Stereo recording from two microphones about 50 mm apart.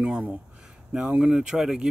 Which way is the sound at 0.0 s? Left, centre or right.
Right.